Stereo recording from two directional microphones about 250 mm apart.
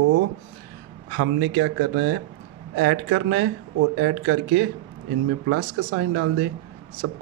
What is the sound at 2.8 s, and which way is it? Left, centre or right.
Speech, right.